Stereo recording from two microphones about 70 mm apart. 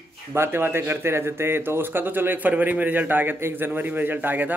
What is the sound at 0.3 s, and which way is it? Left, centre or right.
A man's voice, right.